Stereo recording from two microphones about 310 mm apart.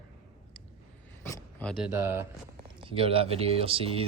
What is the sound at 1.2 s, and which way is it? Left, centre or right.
Speech, centre.